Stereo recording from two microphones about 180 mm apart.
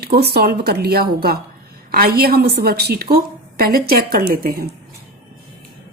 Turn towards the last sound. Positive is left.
turn(degrees=-55)  # may be behind; listen again after turning